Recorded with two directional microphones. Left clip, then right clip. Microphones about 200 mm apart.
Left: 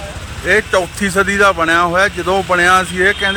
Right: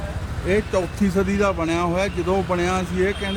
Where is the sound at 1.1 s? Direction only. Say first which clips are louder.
Left 10 dB; 40° left (ahead or behind).